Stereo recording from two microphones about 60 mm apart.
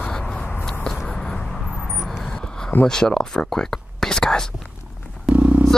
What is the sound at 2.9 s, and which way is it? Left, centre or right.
Speech, centre.